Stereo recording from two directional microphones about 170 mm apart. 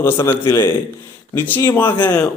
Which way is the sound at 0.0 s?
15° left (ahead or behind).